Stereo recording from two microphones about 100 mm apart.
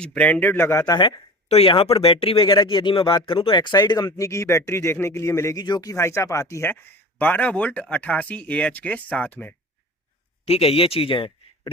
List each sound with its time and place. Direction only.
0.0 s speech: 10° left (ahead or behind)
0.9 s speech: 50° left (ahead or behind)
1.5 s speech: 80° left; by 2.5 s 65° left (ahead or behind)
2.5 s speech: 50° left (ahead or behind)
4.2 s speech: 30° left (ahead or behind)
5.6 s speech: 40° left (ahead or behind); by 9.6 s 15° left (ahead or behind)
10.4 s speech: 85° left; by 11.7 s 55° left (ahead or behind)